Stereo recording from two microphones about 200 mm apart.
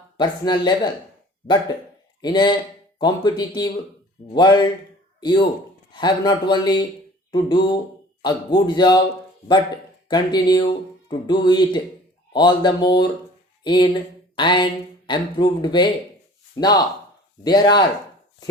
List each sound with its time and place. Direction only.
0.2 s speech: 20° left (ahead or behind)
2.2 s speech: 20° left (ahead or behind)
10.1 s speech: 20° left (ahead or behind)